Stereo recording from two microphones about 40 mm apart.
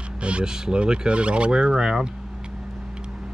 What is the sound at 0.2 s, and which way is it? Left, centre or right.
Speech, right.